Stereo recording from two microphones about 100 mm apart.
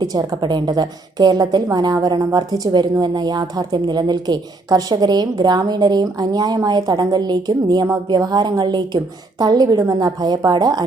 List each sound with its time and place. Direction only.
0.0 s a woman's voice: 40° right (ahead or behind)